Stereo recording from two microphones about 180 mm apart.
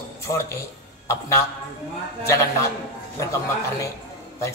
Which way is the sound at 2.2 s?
15° left (ahead or behind).